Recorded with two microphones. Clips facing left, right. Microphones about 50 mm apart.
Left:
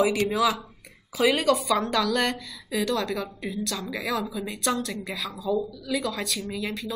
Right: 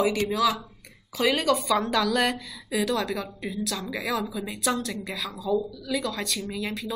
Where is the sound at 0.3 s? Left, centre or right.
Centre.